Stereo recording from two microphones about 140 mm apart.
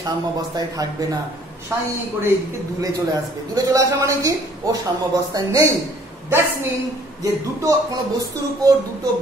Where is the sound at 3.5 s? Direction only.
25° right (ahead or behind).